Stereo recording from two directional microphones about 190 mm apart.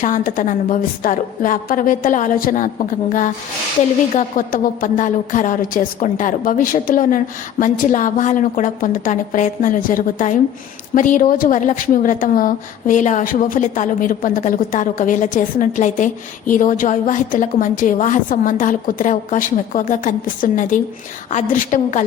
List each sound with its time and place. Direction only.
0.0 s a woman's voice: 45° left (ahead or behind)